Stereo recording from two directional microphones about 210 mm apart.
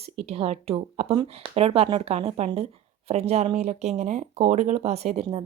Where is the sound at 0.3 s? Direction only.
30° right (ahead or behind).